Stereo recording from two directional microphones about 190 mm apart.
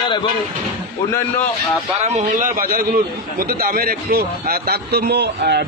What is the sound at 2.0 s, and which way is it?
A man's voice, 35° right (ahead or behind).